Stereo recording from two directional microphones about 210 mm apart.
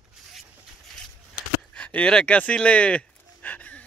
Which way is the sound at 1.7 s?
5° left (ahead or behind).